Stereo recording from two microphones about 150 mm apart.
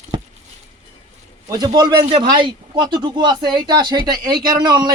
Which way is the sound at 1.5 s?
30° right (ahead or behind).